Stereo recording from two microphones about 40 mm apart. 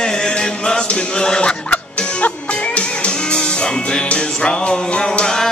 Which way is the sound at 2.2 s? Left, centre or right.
Left.